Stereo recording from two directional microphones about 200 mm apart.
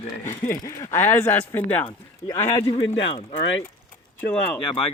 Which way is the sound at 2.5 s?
30° left (ahead or behind).